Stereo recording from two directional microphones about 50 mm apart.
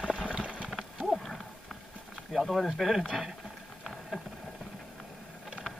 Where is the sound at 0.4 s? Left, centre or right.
Right.